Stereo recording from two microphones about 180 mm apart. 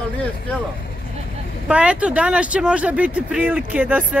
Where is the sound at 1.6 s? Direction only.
5° right (ahead or behind).